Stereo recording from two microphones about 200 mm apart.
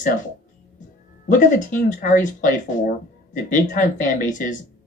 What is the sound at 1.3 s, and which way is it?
Speech, 40° left (ahead or behind).